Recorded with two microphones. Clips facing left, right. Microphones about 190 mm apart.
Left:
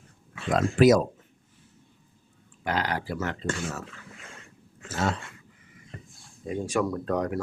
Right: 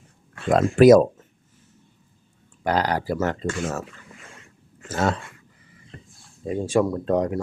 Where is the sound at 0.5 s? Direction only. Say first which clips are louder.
Right 6 dB; 55° right (ahead or behind).